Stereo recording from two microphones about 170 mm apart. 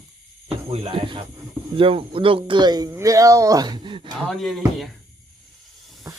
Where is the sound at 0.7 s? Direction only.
30° right (ahead or behind).